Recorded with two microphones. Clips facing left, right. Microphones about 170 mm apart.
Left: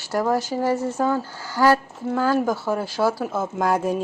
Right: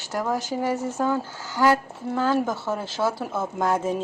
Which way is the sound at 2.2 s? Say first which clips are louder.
Left 2 dB; 5° left (ahead or behind).